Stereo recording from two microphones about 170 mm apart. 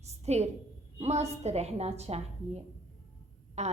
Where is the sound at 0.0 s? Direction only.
40° right (ahead or behind).